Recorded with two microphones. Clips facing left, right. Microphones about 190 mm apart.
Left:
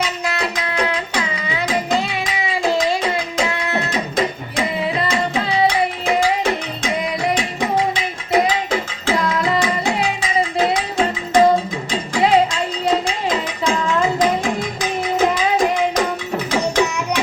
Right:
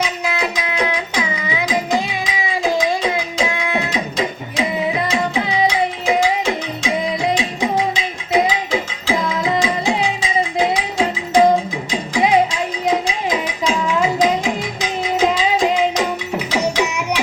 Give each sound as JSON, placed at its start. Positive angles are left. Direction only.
{"t": 0.0, "sound": "music", "side_deg": -15}
{"t": 2.6, "sound": "a sound", "side_deg": -15}
{"t": 4.6, "sound": "music", "side_deg": -20}